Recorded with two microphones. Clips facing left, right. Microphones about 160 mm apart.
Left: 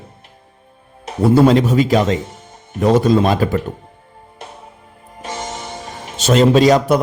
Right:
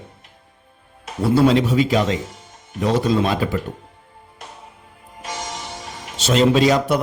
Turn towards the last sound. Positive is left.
turn(degrees=40)  # may be behind; listen again after turning